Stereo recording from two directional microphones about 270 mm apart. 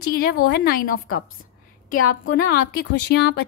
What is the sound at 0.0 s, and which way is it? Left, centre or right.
Speech, left.